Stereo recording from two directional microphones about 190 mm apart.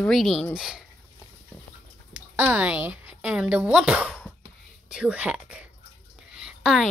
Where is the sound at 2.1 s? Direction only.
10° right (ahead or behind).